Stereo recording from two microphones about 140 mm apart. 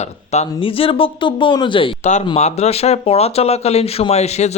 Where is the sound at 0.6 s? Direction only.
40° left (ahead or behind).